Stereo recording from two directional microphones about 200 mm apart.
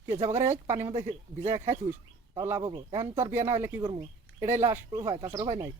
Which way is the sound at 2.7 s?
15° right (ahead or behind).